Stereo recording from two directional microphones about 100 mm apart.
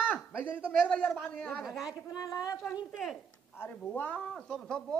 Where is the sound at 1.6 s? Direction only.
Centre (ahead or behind).